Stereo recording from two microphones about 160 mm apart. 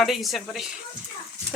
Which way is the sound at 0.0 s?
Centre (ahead or behind).